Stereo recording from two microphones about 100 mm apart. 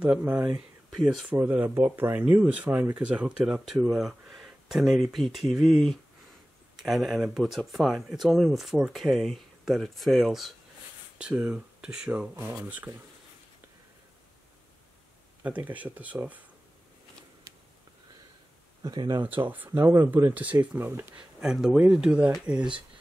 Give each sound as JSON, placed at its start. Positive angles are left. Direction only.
{"t": 0.0, "sound": "speech", "side_deg": -15}
{"t": 0.6, "sound": "speech", "side_deg": -5}
{"t": 1.3, "sound": "speech", "side_deg": -15}
{"t": 15.4, "sound": "speech", "side_deg": -15}
{"t": 18.8, "sound": "speech", "side_deg": -40}
{"t": 19.2, "sound": "speech", "side_deg": -20}
{"t": 21.4, "sound": "speech", "side_deg": -5}